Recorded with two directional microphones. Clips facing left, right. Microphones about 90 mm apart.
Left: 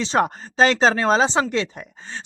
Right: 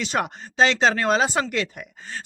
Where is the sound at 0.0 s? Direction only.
30° left (ahead or behind).